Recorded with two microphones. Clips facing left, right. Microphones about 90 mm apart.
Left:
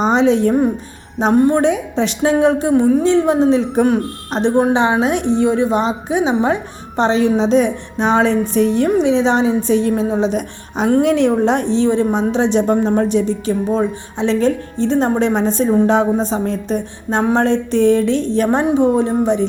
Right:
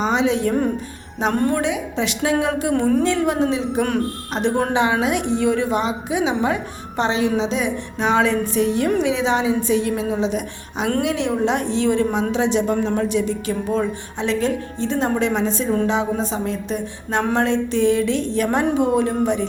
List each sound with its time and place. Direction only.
0.0 s a woman's voice: 40° left (ahead or behind)
1.3 s speech: 20° left (ahead or behind)
1.5 s a woman's voice: 40° left (ahead or behind)
2.7 s speech: 10° left (ahead or behind)
3.1 s speech: 25° left (ahead or behind)
3.5 s a woman's voice: 40° left (ahead or behind)
4.4 s a woman's voice: 25° left (ahead or behind)
8.9 s a woman's voice: 25° left (ahead or behind)
13.5 s speech: 25° left (ahead or behind)
14.3 s a woman's voice: 35° left (ahead or behind)